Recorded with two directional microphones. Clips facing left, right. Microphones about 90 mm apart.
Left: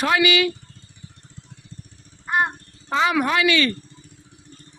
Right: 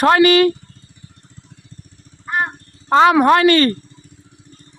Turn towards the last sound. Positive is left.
turn(degrees=-45)  # may be behind; listen again after turning